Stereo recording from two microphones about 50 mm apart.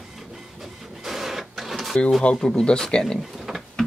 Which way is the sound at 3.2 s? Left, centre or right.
Centre.